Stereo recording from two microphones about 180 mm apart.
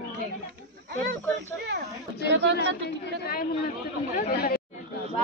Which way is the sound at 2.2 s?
75° right (ahead or behind).